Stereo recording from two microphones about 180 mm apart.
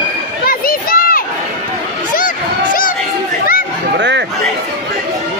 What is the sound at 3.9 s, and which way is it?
Chatter, 80° right.